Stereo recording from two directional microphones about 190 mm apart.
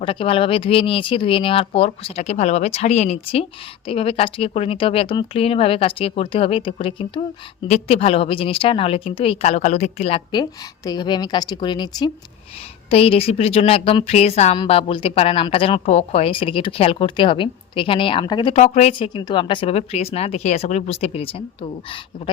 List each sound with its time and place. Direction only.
0.0 s a woman's voice: 30° left (ahead or behind)
18.5 s speech: 35° left (ahead or behind)